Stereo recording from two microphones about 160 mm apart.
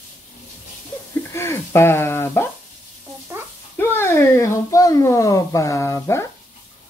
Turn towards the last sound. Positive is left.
turn(degrees=15)  # may be behind; listen again after turning